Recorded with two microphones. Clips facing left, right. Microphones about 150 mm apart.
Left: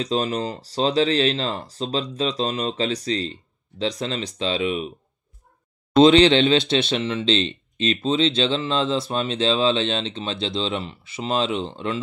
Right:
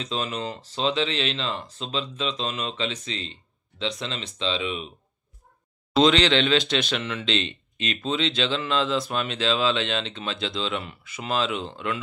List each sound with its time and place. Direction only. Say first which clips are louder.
0.0 s speech: left 6 dB; 40° left (ahead or behind)
6.0 s speech: left 6 dB; 30° left (ahead or behind)